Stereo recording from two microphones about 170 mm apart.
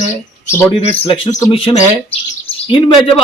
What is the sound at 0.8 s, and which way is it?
Speech, 35° left (ahead or behind).